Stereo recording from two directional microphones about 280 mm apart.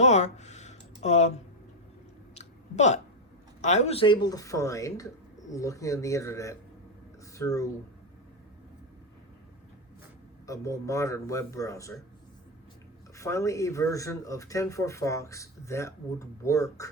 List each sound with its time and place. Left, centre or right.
0.0 s a sound: left
2.3 s chewing: left
3.6 s speech: left
10.4 s speech: centre
13.1 s speech: centre